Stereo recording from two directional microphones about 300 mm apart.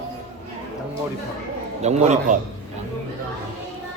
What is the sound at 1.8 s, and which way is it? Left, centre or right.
Speech, right.